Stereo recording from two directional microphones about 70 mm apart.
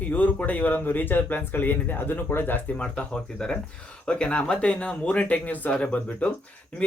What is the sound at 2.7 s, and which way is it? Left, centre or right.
Speech, centre.